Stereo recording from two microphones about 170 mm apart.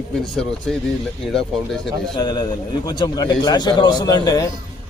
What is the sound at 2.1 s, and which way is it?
A man's voice, 25° left (ahead or behind).